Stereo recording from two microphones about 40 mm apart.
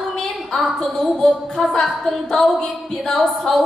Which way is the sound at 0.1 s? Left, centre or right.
Centre.